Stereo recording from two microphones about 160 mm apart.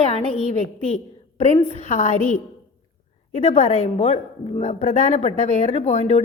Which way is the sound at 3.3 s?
40° left (ahead or behind).